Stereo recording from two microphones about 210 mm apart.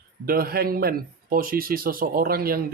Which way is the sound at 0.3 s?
45° right (ahead or behind).